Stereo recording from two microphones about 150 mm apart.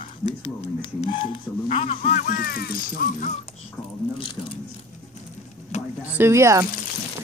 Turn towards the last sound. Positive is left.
turn(degrees=-20)  # may be behind; listen again after turning